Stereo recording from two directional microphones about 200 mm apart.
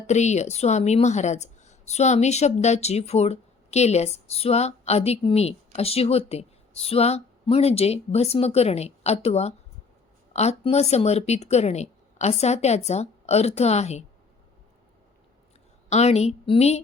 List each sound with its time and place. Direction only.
0.1 s a woman's voice: 35° left (ahead or behind)
15.9 s a woman's voice: 35° left (ahead or behind)